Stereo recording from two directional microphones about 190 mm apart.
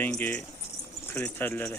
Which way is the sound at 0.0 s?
10° left (ahead or behind).